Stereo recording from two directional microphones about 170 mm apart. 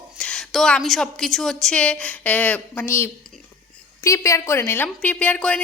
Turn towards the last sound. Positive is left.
turn(degrees=10)  # may be behind; listen again after turning